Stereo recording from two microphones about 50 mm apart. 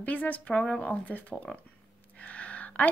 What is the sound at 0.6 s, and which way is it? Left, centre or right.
Speech, centre.